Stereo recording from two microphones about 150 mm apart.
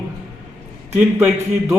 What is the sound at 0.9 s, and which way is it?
Speech, 20° right (ahead or behind).